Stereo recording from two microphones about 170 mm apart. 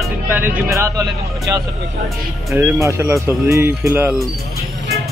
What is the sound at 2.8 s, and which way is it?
Speech, 15° right (ahead or behind).